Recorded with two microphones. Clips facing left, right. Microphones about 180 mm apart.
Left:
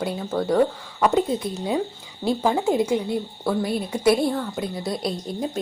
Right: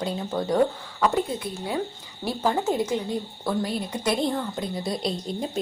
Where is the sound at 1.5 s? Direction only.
20° left (ahead or behind); by 5.6 s centre (ahead or behind).